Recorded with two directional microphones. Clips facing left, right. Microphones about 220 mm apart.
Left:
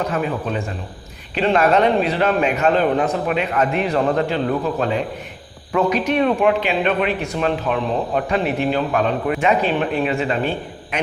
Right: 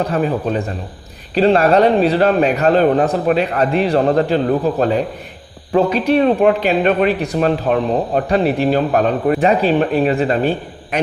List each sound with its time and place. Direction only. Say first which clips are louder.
0.0 s speech: right 4 dB; 35° right (ahead or behind)